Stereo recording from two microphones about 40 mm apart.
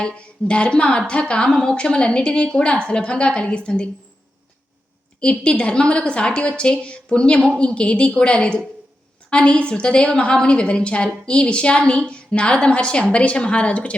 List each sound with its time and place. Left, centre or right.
0.2 s a woman's voice: left
1.5 s a woman's voice: centre
1.7 s a woman's voice: left
5.2 s a woman's voice: left